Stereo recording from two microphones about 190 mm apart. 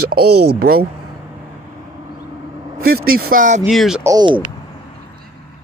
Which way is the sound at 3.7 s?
Centre (ahead or behind).